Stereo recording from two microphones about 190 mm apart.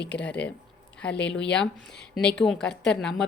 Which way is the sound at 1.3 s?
70° left (ahead or behind).